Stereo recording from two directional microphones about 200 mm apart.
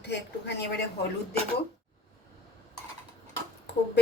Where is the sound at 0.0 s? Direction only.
60° left (ahead or behind).